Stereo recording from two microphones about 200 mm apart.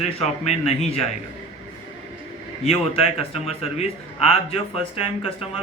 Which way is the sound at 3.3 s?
30° left (ahead or behind).